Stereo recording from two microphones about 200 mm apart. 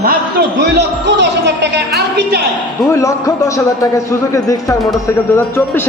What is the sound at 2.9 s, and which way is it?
A man's voice, 15° left (ahead or behind).